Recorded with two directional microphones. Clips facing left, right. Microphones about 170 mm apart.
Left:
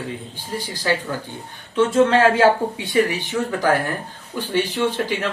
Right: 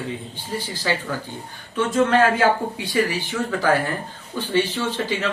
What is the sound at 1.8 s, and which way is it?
Speech, 25° left (ahead or behind).